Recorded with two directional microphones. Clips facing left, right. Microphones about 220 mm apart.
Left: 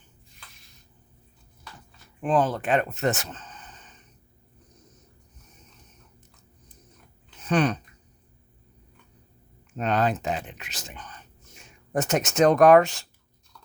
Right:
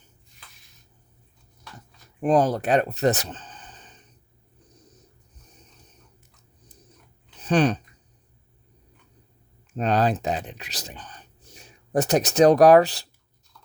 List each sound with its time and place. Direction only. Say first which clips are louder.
2.2 s speech: right 3 dB; 40° right (ahead or behind)
7.4 s speech: right 3 dB; 35° right (ahead or behind)
9.7 s speech: right 2 dB; 35° right (ahead or behind)